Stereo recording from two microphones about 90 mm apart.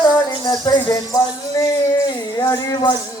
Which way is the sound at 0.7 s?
40° left (ahead or behind).